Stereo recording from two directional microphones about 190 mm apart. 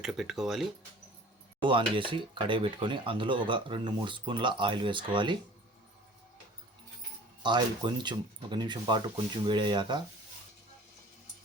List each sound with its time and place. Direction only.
0.0 s speech: centre (ahead or behind)
1.6 s speech: 25° right (ahead or behind)
7.4 s speech: 25° right (ahead or behind)